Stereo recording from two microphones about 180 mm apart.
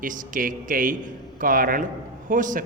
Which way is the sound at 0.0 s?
50° right (ahead or behind).